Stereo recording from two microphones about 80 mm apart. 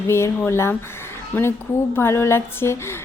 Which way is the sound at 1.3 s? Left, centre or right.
Left.